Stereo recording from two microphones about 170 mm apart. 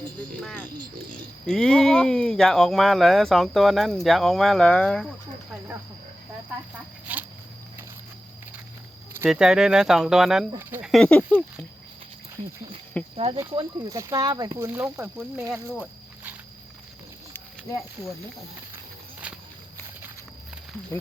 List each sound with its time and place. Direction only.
0.4 s speech: 10° left (ahead or behind)
7.1 s insect: 10° right (ahead or behind)
9.3 s speech: 5° right (ahead or behind)
10.9 s speech: 5° left (ahead or behind)
13.1 s speech: 35° right (ahead or behind); by 15.6 s 15° right (ahead or behind)
19.2 s walk: 5° right (ahead or behind)